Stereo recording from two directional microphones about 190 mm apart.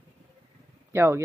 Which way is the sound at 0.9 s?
15° right (ahead or behind).